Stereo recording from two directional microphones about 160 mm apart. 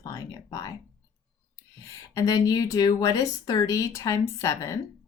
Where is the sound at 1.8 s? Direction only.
20° left (ahead or behind).